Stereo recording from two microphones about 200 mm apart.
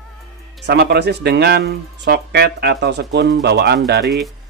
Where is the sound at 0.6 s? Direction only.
55° right (ahead or behind).